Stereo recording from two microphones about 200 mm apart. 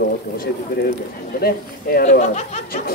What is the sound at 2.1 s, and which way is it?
Speech, 35° left (ahead or behind).